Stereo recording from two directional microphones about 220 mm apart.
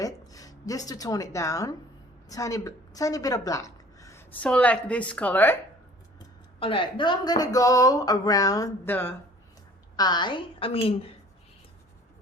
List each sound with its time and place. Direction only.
0.0 s a woman's voice: 15° left (ahead or behind)
6.1 s a woman's voice: 25° left (ahead or behind)